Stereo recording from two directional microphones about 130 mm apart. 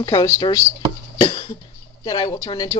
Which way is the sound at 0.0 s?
25° left (ahead or behind).